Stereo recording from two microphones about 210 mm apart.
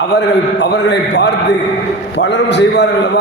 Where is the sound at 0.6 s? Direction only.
55° left (ahead or behind).